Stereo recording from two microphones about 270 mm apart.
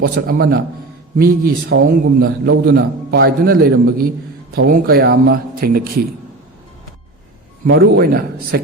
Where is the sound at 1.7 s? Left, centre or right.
Right.